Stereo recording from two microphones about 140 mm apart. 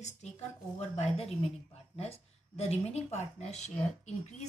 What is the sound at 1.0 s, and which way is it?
Speech, 45° left (ahead or behind).